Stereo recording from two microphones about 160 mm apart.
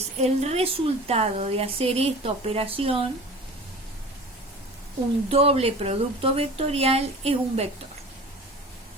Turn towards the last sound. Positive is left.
turn(degrees=-40)  # may be behind; listen again after turning